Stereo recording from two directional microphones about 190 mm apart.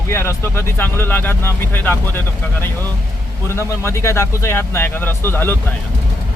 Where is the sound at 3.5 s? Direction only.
15° left (ahead or behind).